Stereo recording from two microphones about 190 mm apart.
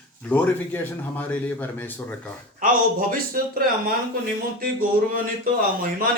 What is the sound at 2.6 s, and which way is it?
Speech, 45° right (ahead or behind).